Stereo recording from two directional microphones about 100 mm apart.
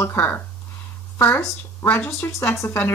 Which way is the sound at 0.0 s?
20° left (ahead or behind).